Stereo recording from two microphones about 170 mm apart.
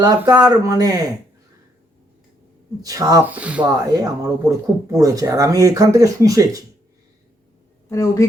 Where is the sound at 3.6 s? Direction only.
20° right (ahead or behind).